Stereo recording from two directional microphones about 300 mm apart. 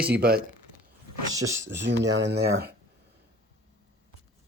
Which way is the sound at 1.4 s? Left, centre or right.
Right.